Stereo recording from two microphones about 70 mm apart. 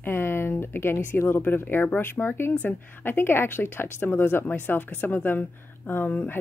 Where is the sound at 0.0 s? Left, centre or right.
Left.